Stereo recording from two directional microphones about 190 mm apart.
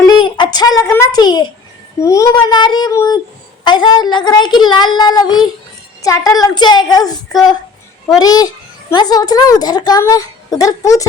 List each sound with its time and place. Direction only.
0.0 s a sound: 20° left (ahead or behind)
0.9 s a woman's voice: 20° left (ahead or behind)
8.2 s a woman's voice: 20° left (ahead or behind)